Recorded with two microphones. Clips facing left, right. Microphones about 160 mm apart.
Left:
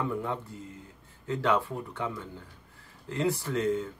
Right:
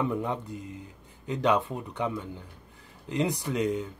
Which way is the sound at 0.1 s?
20° right (ahead or behind).